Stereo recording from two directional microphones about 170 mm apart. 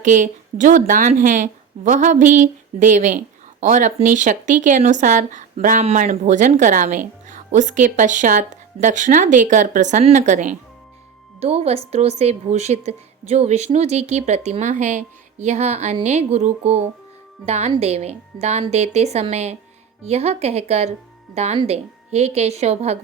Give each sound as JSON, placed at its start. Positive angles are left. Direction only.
{"t": 0.0, "sound": "a woman's voice", "side_deg": -50}